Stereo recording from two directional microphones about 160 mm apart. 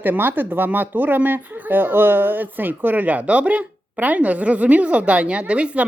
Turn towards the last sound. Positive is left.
turn(degrees=-5)  # may be behind; listen again after turning